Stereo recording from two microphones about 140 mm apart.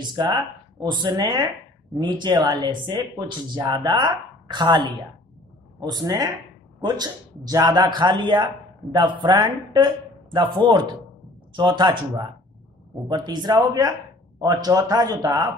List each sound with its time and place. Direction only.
0.1 s speech: 30° right (ahead or behind)